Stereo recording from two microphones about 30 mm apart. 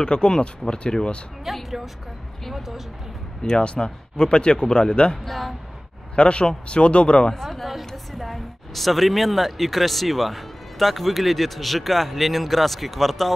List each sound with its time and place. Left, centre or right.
0.0 s speech: left
1.4 s speech: centre
3.4 s speech: left
6.1 s speech: left
7.2 s speech: centre